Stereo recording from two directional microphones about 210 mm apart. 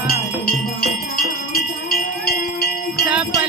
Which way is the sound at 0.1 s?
45° left (ahead or behind).